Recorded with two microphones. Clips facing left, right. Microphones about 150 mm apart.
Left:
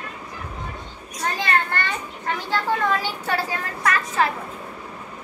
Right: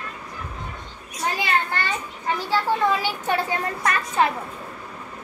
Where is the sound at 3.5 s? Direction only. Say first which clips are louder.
Even; 25° right (ahead or behind).